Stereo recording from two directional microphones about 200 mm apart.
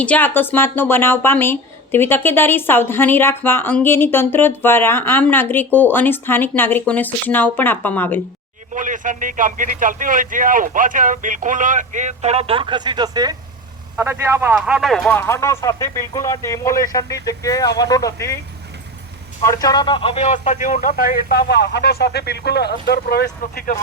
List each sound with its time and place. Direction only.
0.0 s speech: 10° left (ahead or behind)
8.7 s a man's voice: 40° right (ahead or behind); by 14.5 s 15° right (ahead or behind)
14.5 s speech: centre (ahead or behind); by 18.3 s 15° left (ahead or behind)
19.5 s speech: 20° left (ahead or behind); by 23.7 s 50° left (ahead or behind)